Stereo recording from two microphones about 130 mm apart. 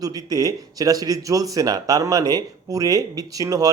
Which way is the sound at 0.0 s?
30° right (ahead or behind).